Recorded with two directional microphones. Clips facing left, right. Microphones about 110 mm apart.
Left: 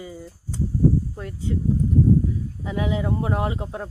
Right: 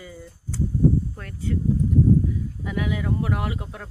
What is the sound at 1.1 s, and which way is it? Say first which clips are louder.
Speech: left 1 dB; 20° left (ahead or behind).